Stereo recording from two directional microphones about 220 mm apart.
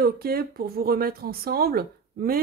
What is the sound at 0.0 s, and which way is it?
Speech, 45° right (ahead or behind).